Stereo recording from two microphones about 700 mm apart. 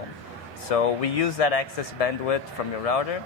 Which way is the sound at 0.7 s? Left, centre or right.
Left.